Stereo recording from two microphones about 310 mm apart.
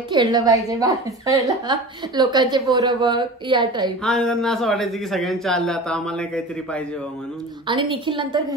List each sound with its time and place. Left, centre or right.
0.1 s a woman's voice: centre
4.0 s a man's voice: centre
7.6 s a woman's voice: centre